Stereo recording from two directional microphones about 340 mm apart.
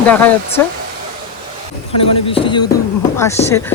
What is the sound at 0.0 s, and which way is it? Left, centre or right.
Speech, centre.